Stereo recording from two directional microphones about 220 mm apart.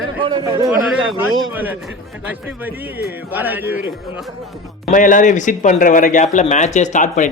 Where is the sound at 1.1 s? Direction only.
10° right (ahead or behind).